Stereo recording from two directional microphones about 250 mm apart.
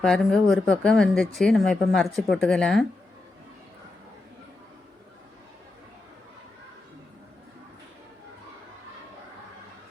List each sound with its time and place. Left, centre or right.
0.0 s speech: centre